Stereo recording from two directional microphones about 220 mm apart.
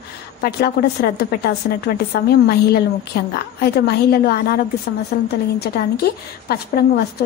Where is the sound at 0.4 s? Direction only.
45° left (ahead or behind).